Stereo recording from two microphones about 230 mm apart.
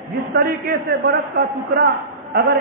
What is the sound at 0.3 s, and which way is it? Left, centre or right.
Speech, right.